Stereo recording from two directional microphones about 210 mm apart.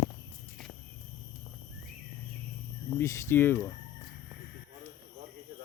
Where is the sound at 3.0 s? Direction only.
10° left (ahead or behind).